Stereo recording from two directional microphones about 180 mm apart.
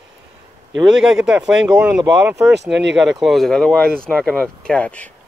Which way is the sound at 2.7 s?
75° right (ahead or behind).